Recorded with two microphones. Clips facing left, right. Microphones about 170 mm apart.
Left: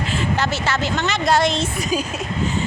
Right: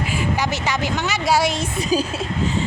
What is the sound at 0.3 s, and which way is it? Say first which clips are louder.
Speech: left 1 dB; 10° right (ahead or behind).